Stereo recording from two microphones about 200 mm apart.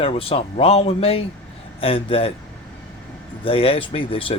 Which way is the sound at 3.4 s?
25° left (ahead or behind).